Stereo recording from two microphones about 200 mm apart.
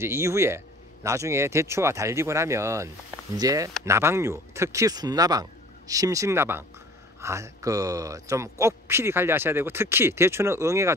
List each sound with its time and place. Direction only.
0.0 s speech: 15° right (ahead or behind)